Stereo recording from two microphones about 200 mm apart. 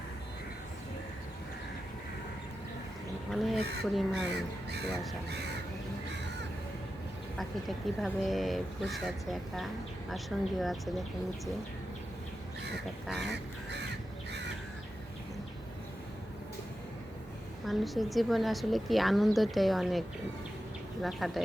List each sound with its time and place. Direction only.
3.3 s a woman's voice: centre (ahead or behind)
7.3 s a woman's voice: centre (ahead or behind)
13.2 s crow: 60° right (ahead or behind)
17.7 s a woman's voice: centre (ahead or behind)